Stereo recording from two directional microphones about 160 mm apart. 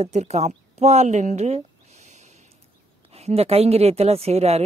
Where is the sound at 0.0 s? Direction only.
45° right (ahead or behind).